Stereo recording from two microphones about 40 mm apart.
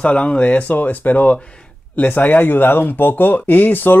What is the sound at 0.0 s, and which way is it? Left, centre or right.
Speech, left.